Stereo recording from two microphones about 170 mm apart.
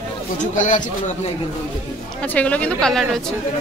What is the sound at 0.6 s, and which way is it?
Speech, 50° left (ahead or behind).